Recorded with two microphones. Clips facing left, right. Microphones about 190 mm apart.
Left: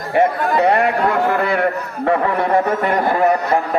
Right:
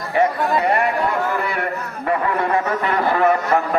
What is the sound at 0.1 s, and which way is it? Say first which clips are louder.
Speech: left 2 dB; 60° left (ahead or behind).